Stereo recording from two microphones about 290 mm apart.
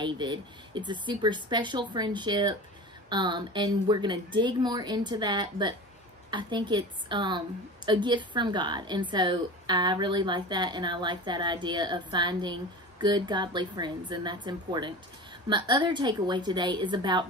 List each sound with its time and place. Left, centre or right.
0.0 s a woman's voice: centre